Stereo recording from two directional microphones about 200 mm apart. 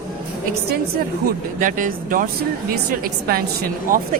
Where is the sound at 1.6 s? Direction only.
40° right (ahead or behind).